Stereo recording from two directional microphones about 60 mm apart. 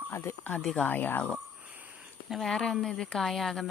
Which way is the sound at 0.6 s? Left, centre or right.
Centre.